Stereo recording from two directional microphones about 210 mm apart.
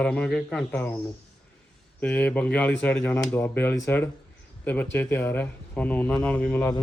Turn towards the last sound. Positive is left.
turn(degrees=5)  # may be behind; listen again after turning